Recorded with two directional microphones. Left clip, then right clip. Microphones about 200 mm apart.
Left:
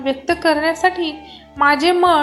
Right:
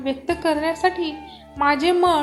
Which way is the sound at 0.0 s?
Centre (ahead or behind).